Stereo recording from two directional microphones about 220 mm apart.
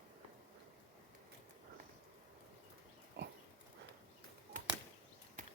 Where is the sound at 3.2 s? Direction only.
50° right (ahead or behind).